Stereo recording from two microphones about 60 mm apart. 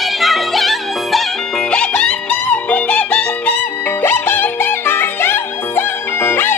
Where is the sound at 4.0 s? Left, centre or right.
Left.